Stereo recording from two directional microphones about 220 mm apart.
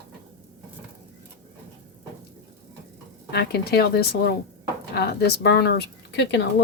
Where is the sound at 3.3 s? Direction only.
45° left (ahead or behind).